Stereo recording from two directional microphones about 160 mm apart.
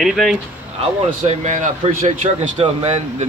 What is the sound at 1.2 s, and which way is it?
Speech, 45° right (ahead or behind).